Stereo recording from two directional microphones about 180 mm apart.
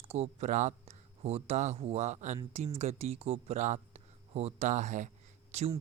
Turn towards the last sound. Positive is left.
turn(degrees=-35)  # may be behind; listen again after turning